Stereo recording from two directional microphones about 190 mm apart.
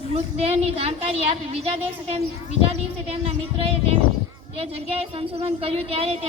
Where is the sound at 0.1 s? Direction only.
35° right (ahead or behind).